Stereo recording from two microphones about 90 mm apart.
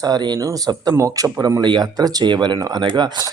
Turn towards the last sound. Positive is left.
turn(degrees=-55)  # may be behind; listen again after turning